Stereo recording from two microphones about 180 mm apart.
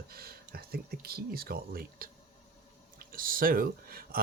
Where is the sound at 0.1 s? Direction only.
60° right (ahead or behind).